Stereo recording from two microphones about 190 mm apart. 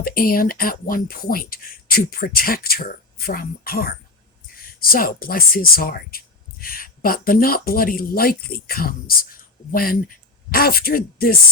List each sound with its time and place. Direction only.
0.0 s speech: 50° left (ahead or behind)